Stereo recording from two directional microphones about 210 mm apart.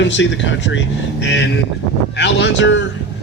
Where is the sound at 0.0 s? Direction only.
60° left (ahead or behind).